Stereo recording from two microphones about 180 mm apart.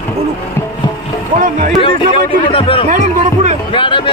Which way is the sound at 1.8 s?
30° left (ahead or behind).